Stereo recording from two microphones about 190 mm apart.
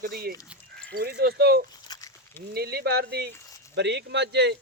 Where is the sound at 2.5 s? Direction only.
55° right (ahead or behind).